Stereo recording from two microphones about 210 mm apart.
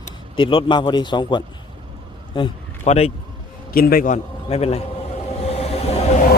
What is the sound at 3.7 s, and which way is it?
Speech, 45° left (ahead or behind).